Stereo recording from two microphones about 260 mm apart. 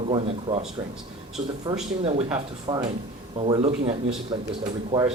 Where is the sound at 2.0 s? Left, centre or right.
Right.